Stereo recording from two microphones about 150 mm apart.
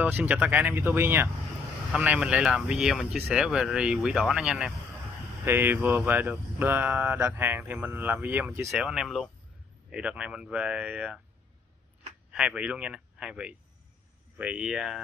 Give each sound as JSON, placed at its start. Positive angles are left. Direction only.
{"t": 0.0, "sound": "speech", "side_deg": -10}
{"t": 8.8, "sound": "speech", "side_deg": 0}
{"t": 12.3, "sound": "speech", "side_deg": -10}